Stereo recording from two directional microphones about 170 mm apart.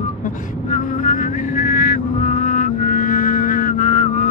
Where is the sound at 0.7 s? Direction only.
50° left (ahead or behind).